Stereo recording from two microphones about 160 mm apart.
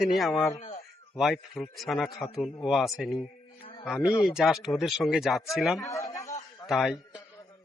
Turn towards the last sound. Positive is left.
turn(degrees=0)  # may be behind; listen again after turning